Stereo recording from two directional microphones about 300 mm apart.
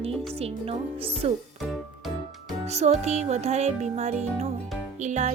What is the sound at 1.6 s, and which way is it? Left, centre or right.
Music, centre.